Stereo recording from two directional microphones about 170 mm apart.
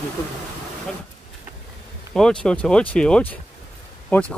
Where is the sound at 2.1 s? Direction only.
5° left (ahead or behind).